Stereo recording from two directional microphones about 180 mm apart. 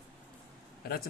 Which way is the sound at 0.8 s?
60° left (ahead or behind).